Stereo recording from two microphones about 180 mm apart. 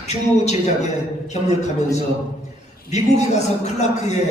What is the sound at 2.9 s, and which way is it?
Speech, 40° left (ahead or behind).